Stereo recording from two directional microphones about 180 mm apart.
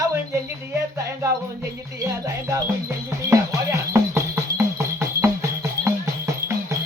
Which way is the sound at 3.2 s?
15° right (ahead or behind).